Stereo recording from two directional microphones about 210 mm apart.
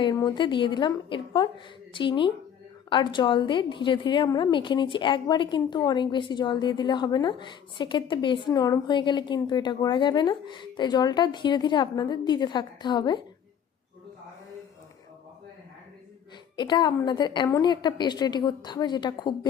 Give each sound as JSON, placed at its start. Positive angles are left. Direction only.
{"t": 0.0, "sound": "a woman's voice", "side_deg": 20}
{"t": 16.6, "sound": "a woman's voice", "side_deg": 20}